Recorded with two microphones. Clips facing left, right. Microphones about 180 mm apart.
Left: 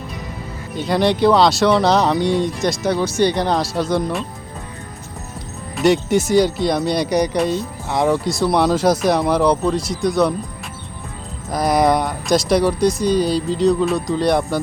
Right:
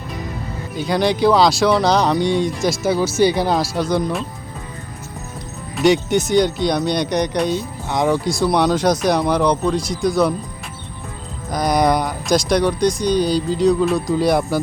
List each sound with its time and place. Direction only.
0.8 s speech: centre (ahead or behind)
5.7 s speech: centre (ahead or behind)
11.5 s speech: centre (ahead or behind)